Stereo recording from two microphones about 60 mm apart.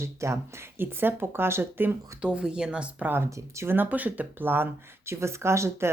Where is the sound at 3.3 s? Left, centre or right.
Right.